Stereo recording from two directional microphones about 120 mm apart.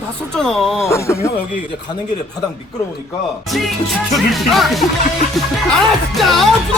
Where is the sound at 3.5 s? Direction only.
Centre (ahead or behind).